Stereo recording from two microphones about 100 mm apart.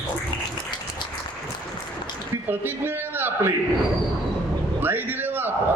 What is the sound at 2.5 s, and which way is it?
A man's voice, 20° right (ahead or behind).